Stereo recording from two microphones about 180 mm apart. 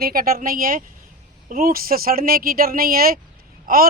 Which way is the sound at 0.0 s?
55° right (ahead or behind).